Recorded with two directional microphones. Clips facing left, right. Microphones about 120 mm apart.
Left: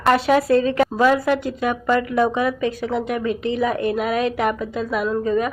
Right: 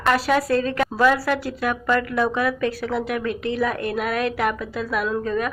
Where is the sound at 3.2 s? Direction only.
60° right (ahead or behind).